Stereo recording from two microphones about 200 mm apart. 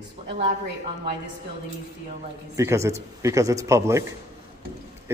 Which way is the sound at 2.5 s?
15° right (ahead or behind).